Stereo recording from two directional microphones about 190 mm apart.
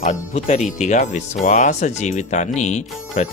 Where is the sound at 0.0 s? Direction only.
35° left (ahead or behind).